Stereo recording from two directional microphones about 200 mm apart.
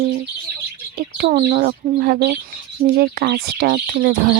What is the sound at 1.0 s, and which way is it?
Speech, 50° right (ahead or behind).